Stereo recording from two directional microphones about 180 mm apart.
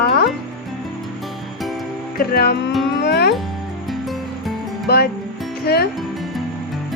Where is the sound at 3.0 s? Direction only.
65° left (ahead or behind).